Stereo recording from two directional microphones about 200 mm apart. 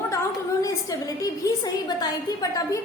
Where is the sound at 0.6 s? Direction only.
15° left (ahead or behind).